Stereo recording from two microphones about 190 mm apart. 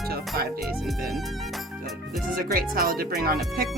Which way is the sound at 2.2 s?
50° right (ahead or behind).